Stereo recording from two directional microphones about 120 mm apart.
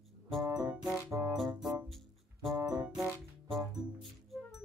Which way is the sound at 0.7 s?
5° right (ahead or behind).